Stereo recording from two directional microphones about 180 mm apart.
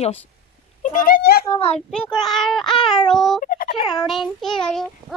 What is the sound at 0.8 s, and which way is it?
Speech, 50° left (ahead or behind).